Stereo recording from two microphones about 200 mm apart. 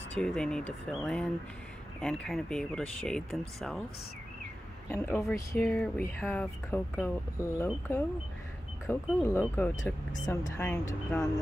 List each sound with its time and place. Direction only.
0.1 s speech: 5° left (ahead or behind)
4.8 s speech: 10° left (ahead or behind)
5.6 s speech: centre (ahead or behind)
10.2 s speech: 20° left (ahead or behind)
10.6 s speech: 5° left (ahead or behind)